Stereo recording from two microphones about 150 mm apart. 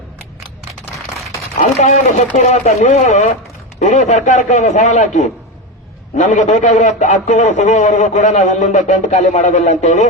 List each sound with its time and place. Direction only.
1.8 s a man's voice: 50° left (ahead or behind)